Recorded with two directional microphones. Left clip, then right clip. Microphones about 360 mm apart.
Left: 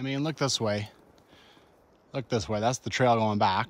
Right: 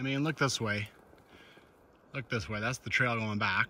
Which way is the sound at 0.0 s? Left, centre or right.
Centre.